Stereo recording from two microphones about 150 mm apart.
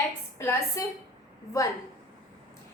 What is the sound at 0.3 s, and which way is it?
Speech, 20° left (ahead or behind).